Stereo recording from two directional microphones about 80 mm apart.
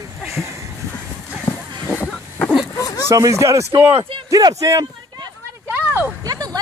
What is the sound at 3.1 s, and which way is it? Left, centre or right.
Speech, right.